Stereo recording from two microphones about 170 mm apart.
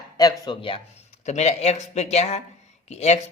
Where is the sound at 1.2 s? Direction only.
40° left (ahead or behind).